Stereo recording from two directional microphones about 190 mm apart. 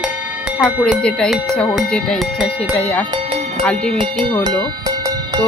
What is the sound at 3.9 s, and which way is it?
Speech, 25° right (ahead or behind).